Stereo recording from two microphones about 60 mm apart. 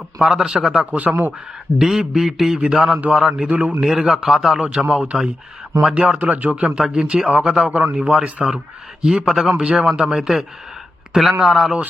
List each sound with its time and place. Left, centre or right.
0.2 s a man's voice: centre
0.9 s speech: right
1.8 s a man's voice: centre
3.5 s speech: centre
3.8 s a man's voice: centre
5.9 s a man's voice: right; by 11.7 s centre